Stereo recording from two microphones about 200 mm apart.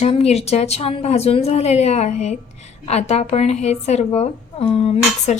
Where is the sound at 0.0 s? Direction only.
30° left (ahead or behind).